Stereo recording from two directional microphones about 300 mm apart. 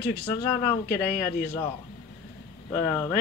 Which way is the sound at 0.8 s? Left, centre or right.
Left.